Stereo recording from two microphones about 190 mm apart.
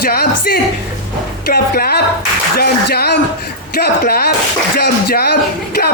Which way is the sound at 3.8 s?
50° left (ahead or behind).